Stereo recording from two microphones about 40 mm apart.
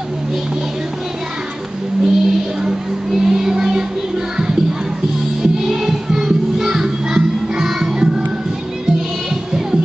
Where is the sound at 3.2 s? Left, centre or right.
Centre.